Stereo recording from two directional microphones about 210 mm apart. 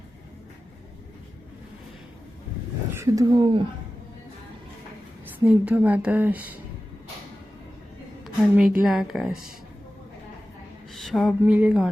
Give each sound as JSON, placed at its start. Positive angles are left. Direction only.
{"t": 2.9, "sound": "speech", "side_deg": -15}
{"t": 5.2, "sound": "a woman's voice", "side_deg": -10}
{"t": 8.2, "sound": "a woman's voice", "side_deg": -5}
{"t": 10.9, "sound": "a sound", "side_deg": 0}